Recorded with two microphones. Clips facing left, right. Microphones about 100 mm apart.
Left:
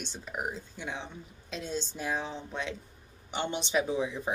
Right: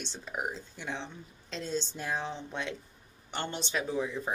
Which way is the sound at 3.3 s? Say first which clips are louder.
Left 4 dB; 15° left (ahead or behind).